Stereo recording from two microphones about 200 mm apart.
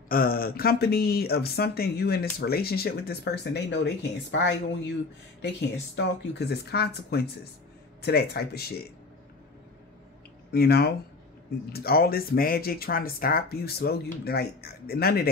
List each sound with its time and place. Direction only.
0.1 s speech: 45° left (ahead or behind)
5.9 s speech: 55° left (ahead or behind)
10.5 s speech: 50° left (ahead or behind)